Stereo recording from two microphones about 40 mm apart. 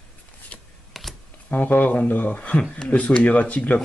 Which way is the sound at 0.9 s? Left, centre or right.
Centre.